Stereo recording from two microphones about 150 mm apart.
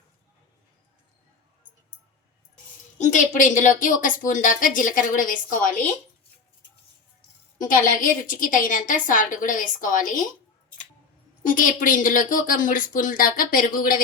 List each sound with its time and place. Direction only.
3.0 s a woman's voice: 60° left (ahead or behind)
7.6 s a woman's voice: 65° left (ahead or behind)
11.4 s a woman's voice: 65° left (ahead or behind)